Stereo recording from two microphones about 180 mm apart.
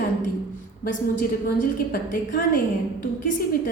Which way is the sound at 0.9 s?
55° left (ahead or behind).